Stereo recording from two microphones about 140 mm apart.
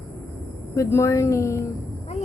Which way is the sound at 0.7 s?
20° left (ahead or behind).